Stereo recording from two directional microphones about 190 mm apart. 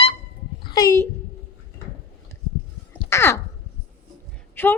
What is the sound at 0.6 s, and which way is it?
Speech, 15° left (ahead or behind).